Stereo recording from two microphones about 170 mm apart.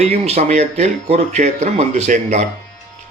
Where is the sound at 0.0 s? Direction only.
40° right (ahead or behind).